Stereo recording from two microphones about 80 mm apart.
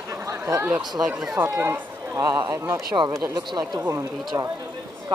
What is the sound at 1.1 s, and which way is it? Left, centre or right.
Speech, centre.